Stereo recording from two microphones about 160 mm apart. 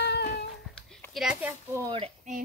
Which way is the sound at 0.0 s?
80° left.